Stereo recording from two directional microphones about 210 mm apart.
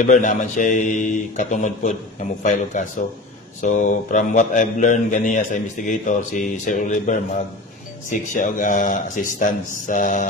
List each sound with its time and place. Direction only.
0.0 s speech: 35° left (ahead or behind)